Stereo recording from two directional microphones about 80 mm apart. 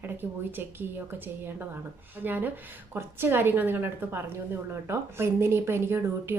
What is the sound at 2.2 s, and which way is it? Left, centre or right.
A woman's voice, right.